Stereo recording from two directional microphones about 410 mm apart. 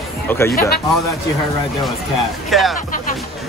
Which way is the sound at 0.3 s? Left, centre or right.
Centre.